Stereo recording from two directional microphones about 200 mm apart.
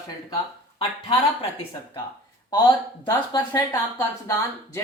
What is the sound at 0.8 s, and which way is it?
Speech, 30° left (ahead or behind).